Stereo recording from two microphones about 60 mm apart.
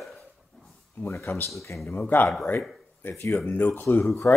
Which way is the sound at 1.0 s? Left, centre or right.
Left.